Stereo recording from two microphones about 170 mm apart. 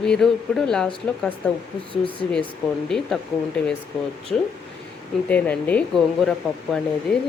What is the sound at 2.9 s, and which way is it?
Speech, centre (ahead or behind).